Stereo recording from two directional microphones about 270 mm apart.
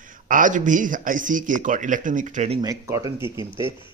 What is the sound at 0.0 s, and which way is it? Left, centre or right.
A man's voice, right.